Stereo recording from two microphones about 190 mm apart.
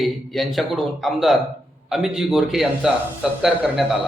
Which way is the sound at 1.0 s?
Centre (ahead or behind).